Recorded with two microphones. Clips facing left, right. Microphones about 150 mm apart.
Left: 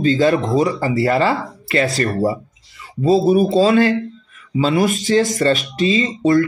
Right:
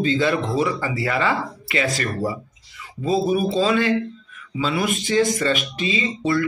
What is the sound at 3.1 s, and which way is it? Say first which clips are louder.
Speech: left 6 dB; 40° left (ahead or behind).